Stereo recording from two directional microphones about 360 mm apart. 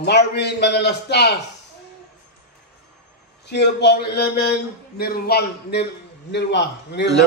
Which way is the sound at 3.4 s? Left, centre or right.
Left.